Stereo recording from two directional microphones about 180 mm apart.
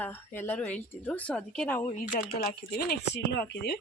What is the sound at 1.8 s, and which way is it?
Speech, 45° left (ahead or behind).